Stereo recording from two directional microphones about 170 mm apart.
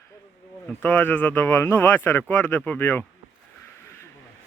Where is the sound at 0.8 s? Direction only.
10° left (ahead or behind).